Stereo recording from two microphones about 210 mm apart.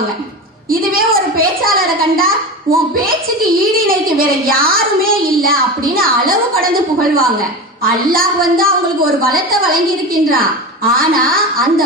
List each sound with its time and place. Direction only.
0.7 s a woman's voice: 45° right (ahead or behind)